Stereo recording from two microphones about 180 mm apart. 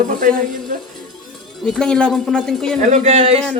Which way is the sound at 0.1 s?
50° right (ahead or behind).